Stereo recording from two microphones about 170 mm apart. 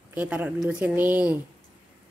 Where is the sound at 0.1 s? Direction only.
10° right (ahead or behind).